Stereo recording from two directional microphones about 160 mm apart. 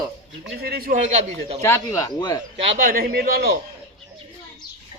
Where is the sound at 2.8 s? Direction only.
60° right (ahead or behind); by 3.5 s 80° right.